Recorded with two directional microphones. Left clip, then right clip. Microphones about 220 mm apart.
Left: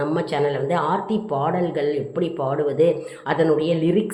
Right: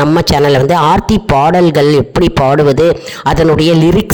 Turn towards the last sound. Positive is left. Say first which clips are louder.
# right 11 dB
turn(degrees=-50)  # may be behind; listen again after turning